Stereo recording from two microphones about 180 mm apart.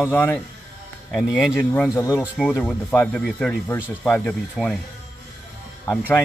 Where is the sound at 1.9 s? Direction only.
15° left (ahead or behind).